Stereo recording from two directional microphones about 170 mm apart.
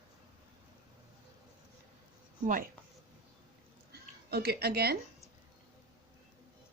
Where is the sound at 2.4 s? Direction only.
55° right (ahead or behind).